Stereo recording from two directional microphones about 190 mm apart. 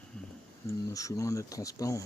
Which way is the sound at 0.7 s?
15° left (ahead or behind).